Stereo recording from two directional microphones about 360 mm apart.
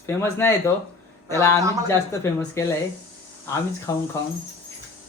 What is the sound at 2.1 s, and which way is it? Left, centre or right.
Speech, centre.